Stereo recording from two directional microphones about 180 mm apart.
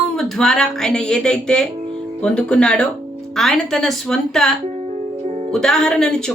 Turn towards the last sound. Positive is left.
turn(degrees=5)  # may be behind; listen again after turning